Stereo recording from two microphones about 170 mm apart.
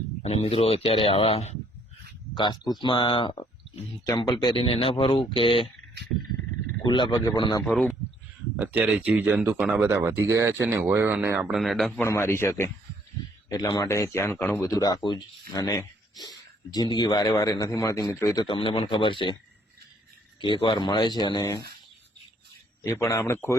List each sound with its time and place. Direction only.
0.2 s speech: 35° left (ahead or behind)
6.8 s speech: 30° left (ahead or behind)
7.6 s speech: 5° left (ahead or behind)
8.6 s speech: 10° right (ahead or behind)
11.3 s speech: 5° right (ahead or behind)
11.9 s a man's voice: 15° left (ahead or behind); by 19.4 s 30° left (ahead or behind)
20.4 s speech: 25° left (ahead or behind)
22.8 s a man's voice: 15° left (ahead or behind)